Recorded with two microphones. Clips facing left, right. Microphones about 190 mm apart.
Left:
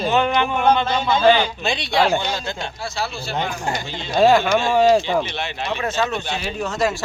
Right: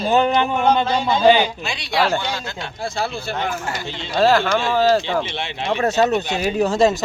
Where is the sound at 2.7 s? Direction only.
50° right (ahead or behind).